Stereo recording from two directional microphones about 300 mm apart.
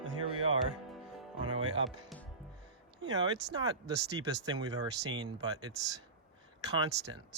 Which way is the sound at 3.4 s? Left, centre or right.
Right.